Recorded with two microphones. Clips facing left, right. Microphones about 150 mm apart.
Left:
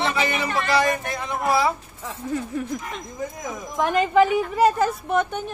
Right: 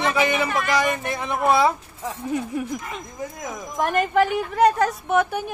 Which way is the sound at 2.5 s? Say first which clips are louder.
Right 1 dB; 10° right (ahead or behind).